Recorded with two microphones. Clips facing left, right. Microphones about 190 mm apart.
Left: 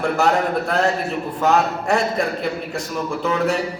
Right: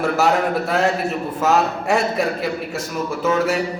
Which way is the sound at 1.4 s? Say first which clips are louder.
Even; 5° right (ahead or behind).